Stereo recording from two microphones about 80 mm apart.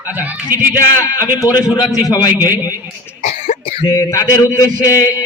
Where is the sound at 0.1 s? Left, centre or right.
Right.